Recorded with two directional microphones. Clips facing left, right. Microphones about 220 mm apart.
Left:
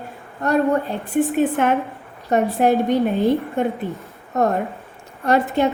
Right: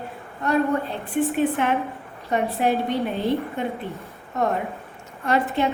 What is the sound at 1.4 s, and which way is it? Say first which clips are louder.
A woman's voice: left 3 dB; 45° left (ahead or behind).